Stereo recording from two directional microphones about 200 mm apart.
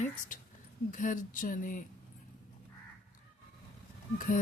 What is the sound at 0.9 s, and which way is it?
Speech, 40° left (ahead or behind).